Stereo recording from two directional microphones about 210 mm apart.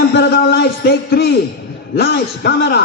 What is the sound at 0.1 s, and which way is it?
Speech, 50° left (ahead or behind).